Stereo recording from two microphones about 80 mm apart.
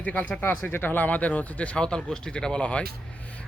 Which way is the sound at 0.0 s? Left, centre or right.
Centre.